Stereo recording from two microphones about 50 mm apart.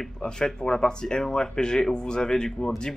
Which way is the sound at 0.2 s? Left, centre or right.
Centre.